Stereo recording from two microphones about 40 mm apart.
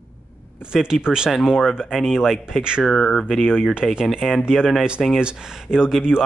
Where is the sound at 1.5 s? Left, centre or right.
Centre.